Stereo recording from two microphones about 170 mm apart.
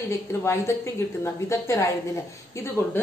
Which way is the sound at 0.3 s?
15° left (ahead or behind).